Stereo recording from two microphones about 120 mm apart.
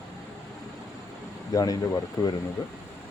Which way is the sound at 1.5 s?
30° left (ahead or behind).